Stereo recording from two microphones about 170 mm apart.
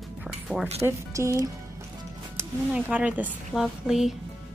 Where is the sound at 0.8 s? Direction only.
15° right (ahead or behind).